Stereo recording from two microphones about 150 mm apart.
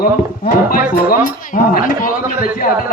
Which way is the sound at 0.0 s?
65° left (ahead or behind).